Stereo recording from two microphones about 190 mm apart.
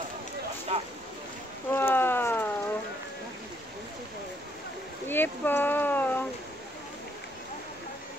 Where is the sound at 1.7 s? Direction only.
10° left (ahead or behind).